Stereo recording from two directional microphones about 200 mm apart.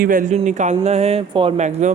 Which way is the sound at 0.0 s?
45° right (ahead or behind).